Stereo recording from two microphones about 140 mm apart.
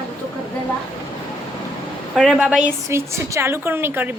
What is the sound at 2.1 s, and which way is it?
Speech, centre (ahead or behind).